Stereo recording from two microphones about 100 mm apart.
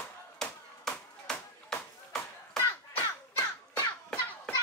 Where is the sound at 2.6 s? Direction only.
20° left (ahead or behind).